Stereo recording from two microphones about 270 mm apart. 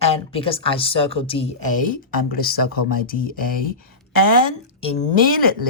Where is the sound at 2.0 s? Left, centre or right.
Left.